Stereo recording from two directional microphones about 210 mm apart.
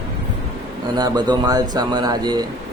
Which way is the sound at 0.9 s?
20° right (ahead or behind).